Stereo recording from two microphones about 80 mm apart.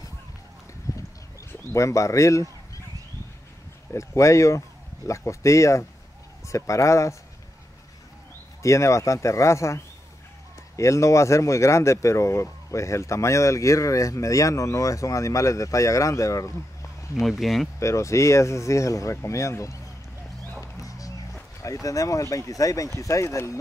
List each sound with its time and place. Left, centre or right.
0.9 s a sound: left
1.5 s speech: left
3.9 s speech: left
8.6 s speech: left
10.8 s speech: left
17.1 s speech: centre
17.7 s speech: left
21.8 s speech: left